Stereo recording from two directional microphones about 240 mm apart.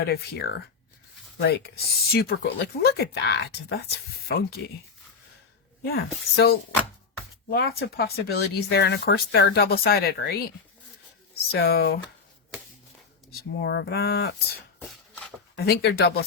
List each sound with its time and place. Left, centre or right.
0.0 s speech: left
5.8 s speech: left
11.5 s speech: left
13.6 s speech: left
14.8 s a sound: centre
15.5 s speech: left